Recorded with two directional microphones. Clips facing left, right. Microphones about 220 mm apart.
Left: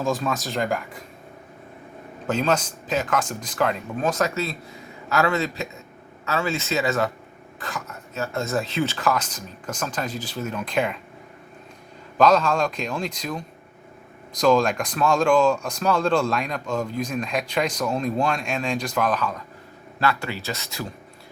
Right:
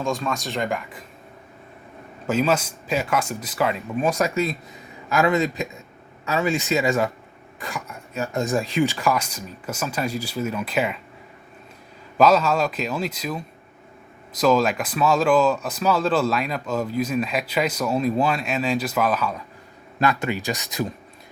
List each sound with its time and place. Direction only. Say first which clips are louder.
0.0 s speech: left 1 dB; centre (ahead or behind)
2.2 s speech: right 2 dB; 5° right (ahead or behind)
12.1 s speech: right 1 dB; 5° right (ahead or behind)
20.0 s speech: right 3 dB; 20° right (ahead or behind)